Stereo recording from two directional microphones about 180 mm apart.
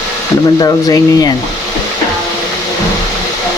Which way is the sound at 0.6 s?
20° left (ahead or behind).